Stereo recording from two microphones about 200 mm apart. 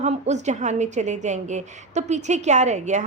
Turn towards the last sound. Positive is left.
turn(degrees=-35)  # may be behind; listen again after turning